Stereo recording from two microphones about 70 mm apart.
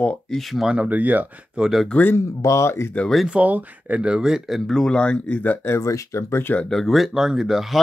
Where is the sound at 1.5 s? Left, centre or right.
Centre.